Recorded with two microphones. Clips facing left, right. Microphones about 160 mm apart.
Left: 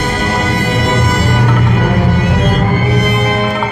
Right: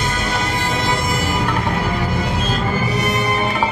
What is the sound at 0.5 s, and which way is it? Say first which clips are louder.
Music: left 6 dB; 65° left (ahead or behind).